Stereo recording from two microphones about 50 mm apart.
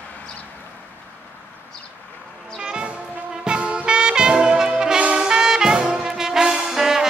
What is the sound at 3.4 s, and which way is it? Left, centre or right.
Trumpet, centre.